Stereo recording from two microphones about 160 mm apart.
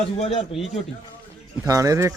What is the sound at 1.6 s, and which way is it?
Speech, 20° right (ahead or behind).